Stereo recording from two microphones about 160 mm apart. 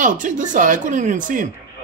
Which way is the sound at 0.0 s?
50° right (ahead or behind).